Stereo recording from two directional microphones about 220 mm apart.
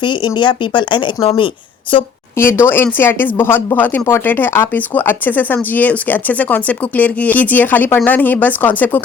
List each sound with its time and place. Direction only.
0.0 s speech: 20° left (ahead or behind)
2.4 s speech: 10° left (ahead or behind)